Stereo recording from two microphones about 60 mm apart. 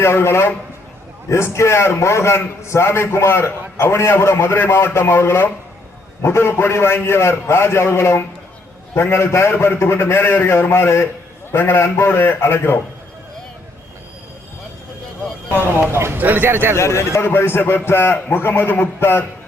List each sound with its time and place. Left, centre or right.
0.0 s a man's voice: left
15.9 s a man's voice: right
16.1 s a man's voice: right
16.7 s a man's voice: left